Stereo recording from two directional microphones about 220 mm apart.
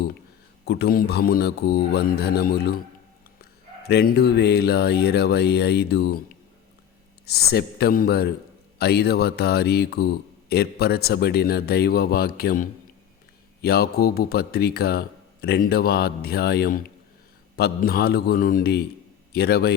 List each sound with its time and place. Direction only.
0.6 s speech: 50° left (ahead or behind)
3.8 s a man's voice: 45° left (ahead or behind)